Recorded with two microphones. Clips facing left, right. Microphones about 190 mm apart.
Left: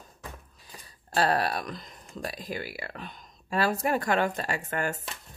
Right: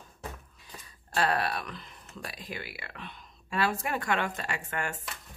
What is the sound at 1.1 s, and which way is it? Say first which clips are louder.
Speech: left 3 dB; 35° left (ahead or behind).